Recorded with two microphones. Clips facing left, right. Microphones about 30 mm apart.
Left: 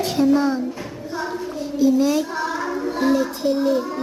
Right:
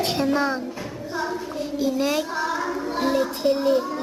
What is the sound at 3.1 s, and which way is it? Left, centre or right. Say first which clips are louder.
Music: right 1 dB; right.